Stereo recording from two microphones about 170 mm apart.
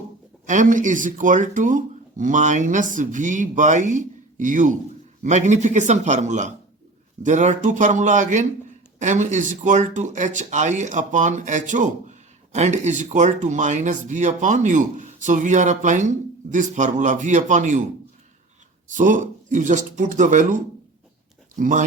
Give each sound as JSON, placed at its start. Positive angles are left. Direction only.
{"t": 0.4, "sound": "speech", "side_deg": -50}
{"t": 18.9, "sound": "speech", "side_deg": -50}